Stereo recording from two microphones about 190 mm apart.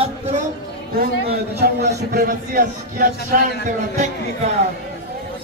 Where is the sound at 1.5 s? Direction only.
60° right (ahead or behind).